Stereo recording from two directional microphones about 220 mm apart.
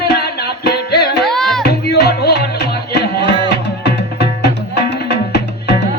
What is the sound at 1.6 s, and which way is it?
Music, 45° left (ahead or behind).